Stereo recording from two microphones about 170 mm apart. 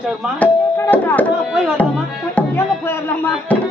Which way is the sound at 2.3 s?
15° left (ahead or behind).